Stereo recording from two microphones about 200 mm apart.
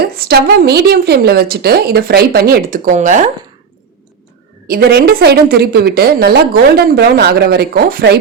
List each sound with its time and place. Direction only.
0.0 s a woman's voice: 50° right (ahead or behind)
4.7 s a woman's voice: 50° right (ahead or behind)